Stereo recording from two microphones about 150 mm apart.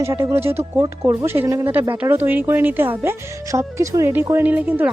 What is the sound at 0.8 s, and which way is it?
Speech, 25° right (ahead or behind).